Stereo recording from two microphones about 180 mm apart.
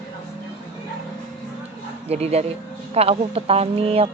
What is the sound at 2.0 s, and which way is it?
Speech, 35° right (ahead or behind).